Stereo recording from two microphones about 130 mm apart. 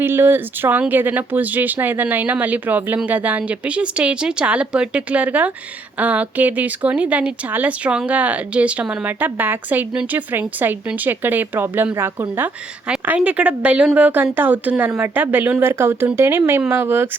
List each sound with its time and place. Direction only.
0.0 s speech: 15° right (ahead or behind)